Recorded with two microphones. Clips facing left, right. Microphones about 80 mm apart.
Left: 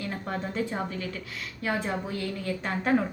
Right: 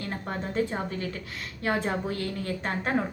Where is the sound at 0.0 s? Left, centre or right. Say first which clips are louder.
Left 1 dB; right.